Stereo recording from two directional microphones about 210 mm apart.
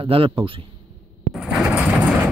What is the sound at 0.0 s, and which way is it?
Speech, 25° right (ahead or behind).